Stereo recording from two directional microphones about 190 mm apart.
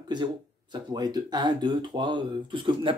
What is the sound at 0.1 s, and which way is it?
Speech, 25° right (ahead or behind).